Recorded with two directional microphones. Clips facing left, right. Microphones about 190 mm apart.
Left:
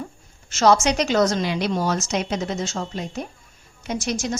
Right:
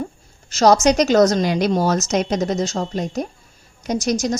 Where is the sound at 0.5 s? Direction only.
40° right (ahead or behind).